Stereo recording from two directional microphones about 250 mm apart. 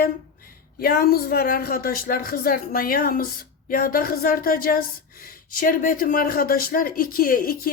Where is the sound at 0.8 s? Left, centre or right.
Left.